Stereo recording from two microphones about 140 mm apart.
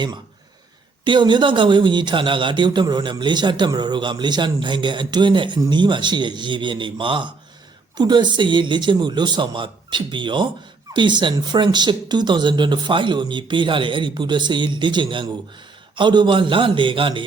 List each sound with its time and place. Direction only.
1.0 s speech: 35° right (ahead or behind)